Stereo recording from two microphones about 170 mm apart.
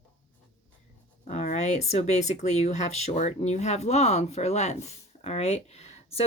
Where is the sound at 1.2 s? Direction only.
40° left (ahead or behind).